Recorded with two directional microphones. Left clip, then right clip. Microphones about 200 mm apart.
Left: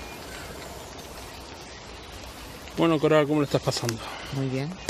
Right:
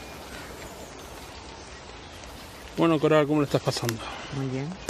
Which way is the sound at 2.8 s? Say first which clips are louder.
Even; centre (ahead or behind).